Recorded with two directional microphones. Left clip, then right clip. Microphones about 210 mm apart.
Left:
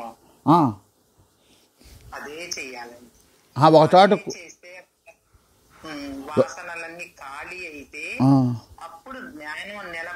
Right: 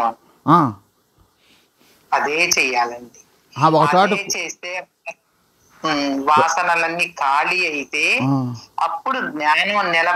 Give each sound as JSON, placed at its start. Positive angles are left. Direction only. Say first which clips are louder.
{"t": 0.4, "sound": "speech", "louder": "right 3 dB", "side_deg": 5}
{"t": 2.0, "sound": "speech", "louder": "right 17 dB", "side_deg": -40}
{"t": 3.5, "sound": "a man's voice", "louder": "left 1 dB", "side_deg": 25}
{"t": 4.2, "sound": "speech", "louder": "right 11 dB", "side_deg": -40}
{"t": 8.3, "sound": "a man's voice", "louder": "left 2 dB", "side_deg": 20}
{"t": 8.7, "sound": "speech", "louder": "right 18 dB", "side_deg": -45}